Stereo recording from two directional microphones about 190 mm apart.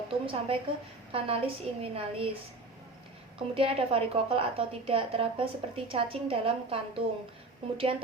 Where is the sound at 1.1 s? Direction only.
30° right (ahead or behind).